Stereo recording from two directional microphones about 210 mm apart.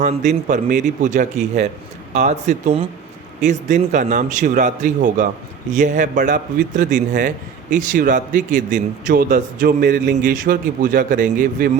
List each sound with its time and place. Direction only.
0.0 s a man's voice: 35° right (ahead or behind)